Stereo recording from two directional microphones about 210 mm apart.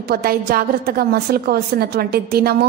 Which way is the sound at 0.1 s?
45° right (ahead or behind).